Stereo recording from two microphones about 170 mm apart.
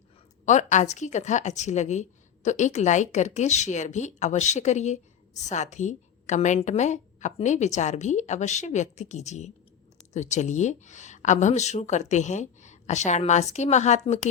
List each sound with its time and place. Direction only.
0.4 s a woman's voice: 45° left (ahead or behind)